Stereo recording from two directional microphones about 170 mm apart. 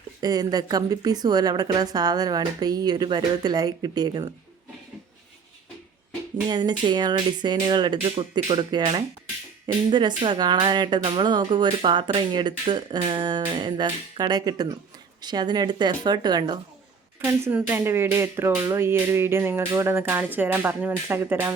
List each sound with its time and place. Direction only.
0.2 s a woman's voice: 20° right (ahead or behind)
6.5 s a woman's voice: 25° right (ahead or behind)
17.2 s a sound: 15° right (ahead or behind)